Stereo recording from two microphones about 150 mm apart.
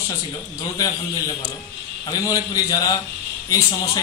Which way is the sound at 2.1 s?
25° left (ahead or behind).